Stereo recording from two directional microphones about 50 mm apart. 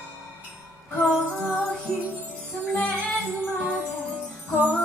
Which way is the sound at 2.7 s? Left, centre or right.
Left.